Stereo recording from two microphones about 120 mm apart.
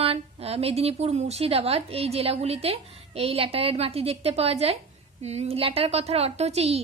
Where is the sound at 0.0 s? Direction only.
55° right (ahead or behind).